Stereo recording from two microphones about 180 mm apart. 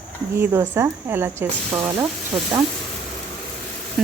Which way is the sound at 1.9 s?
25° right (ahead or behind).